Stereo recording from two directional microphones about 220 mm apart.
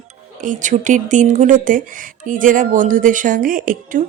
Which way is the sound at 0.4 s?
35° right (ahead or behind).